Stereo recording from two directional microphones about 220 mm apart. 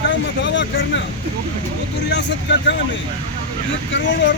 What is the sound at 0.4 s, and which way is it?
Speech, 55° left (ahead or behind).